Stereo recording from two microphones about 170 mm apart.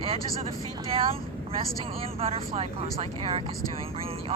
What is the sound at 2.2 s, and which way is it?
Speech, 35° right (ahead or behind).